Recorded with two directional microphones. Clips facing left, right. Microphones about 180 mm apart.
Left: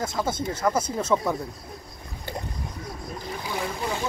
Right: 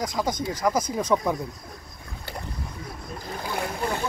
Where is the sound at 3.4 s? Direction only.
55° right (ahead or behind).